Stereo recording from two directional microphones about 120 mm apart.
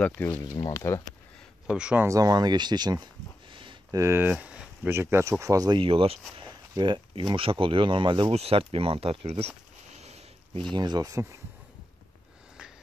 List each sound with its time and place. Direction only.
0.0 s speech: 10° left (ahead or behind)
0.7 s speech: 25° left (ahead or behind)
1.7 s speech: 10° right (ahead or behind)
2.0 s speech: 30° right (ahead or behind)
3.9 s speech: 20° right (ahead or behind)
5.8 s speech: 50° right (ahead or behind)
6.7 s speech: 40° right (ahead or behind)
8.3 s speech: 60° right (ahead or behind)
10.0 s a sound: 60° right (ahead or behind)
10.7 s speech: 35° right (ahead or behind)